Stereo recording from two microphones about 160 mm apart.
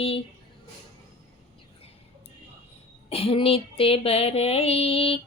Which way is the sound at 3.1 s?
35° left (ahead or behind).